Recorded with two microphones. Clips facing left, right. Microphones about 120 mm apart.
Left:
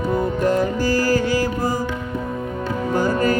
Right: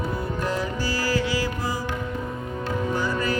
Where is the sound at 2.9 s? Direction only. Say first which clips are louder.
Left 9 dB; 45° left (ahead or behind).